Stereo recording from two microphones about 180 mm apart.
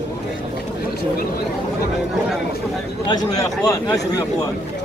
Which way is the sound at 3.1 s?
20° left (ahead or behind).